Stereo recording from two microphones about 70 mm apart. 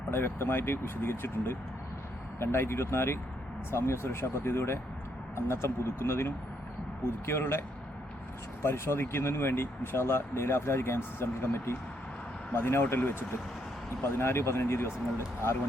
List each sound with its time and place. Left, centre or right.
0.1 s speech: left
8.6 s speech: left